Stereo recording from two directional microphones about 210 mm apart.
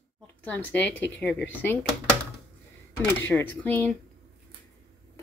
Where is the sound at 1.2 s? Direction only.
55° left (ahead or behind).